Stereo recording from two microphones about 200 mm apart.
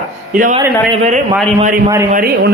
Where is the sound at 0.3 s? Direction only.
40° right (ahead or behind).